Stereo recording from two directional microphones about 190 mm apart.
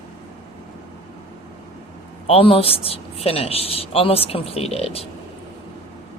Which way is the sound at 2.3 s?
30° left (ahead or behind).